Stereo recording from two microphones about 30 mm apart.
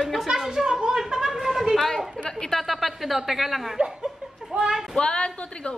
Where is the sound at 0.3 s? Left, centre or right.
Centre.